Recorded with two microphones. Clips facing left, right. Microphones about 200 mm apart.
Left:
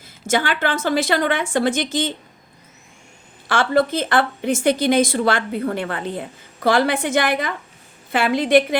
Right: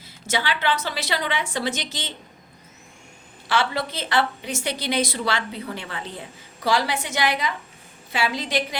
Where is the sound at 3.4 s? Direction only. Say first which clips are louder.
Left 7 dB; 50° left (ahead or behind).